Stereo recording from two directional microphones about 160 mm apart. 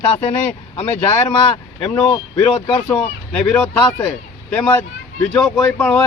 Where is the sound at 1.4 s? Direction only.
35° left (ahead or behind).